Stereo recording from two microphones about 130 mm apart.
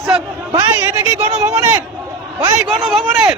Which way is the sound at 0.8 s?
25° right (ahead or behind).